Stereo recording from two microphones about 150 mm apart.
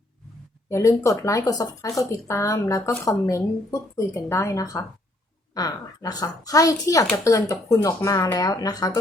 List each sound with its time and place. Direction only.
0.7 s speech: 20° left (ahead or behind)